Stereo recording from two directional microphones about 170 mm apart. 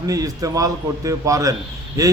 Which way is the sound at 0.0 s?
20° right (ahead or behind).